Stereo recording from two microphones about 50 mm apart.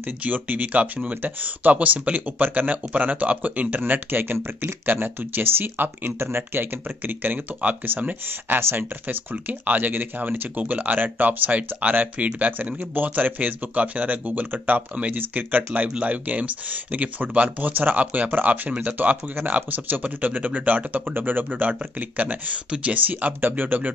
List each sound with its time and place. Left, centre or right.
0.2 s speech: right
9.0 s speech: right